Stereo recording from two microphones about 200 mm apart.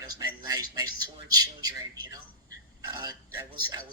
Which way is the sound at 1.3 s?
20° right (ahead or behind).